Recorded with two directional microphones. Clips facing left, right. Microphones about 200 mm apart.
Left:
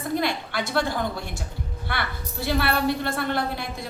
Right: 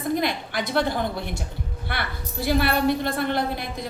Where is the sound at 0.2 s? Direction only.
15° right (ahead or behind).